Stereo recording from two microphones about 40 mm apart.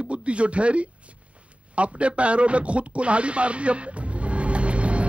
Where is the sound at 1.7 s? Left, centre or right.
Right.